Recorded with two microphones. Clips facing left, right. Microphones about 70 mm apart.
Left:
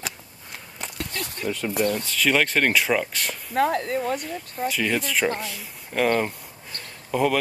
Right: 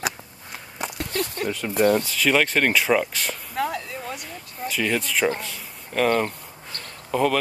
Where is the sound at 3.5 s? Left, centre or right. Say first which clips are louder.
Left 6 dB; left.